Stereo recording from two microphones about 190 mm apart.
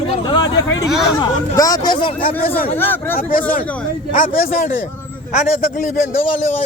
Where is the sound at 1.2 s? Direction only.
20° left (ahead or behind).